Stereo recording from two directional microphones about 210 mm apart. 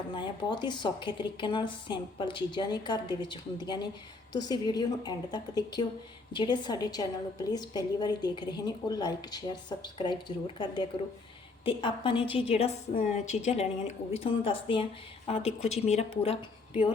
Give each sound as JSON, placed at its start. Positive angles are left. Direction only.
{"t": 0.1, "sound": "a woman's voice", "side_deg": 20}
{"t": 15.4, "sound": "speech", "side_deg": 0}
{"t": 15.9, "sound": "a woman's voice", "side_deg": 30}